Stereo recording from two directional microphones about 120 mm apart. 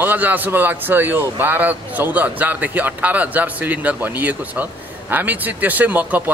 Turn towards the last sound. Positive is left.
turn(degrees=-15)  # may be behind; listen again after turning